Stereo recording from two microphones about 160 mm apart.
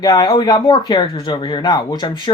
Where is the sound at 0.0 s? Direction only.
25° left (ahead or behind).